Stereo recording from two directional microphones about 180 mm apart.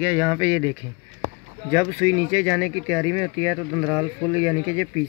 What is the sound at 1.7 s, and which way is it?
Speech, 15° left (ahead or behind).